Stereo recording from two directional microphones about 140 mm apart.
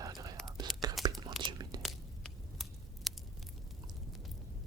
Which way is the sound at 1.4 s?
30° right (ahead or behind).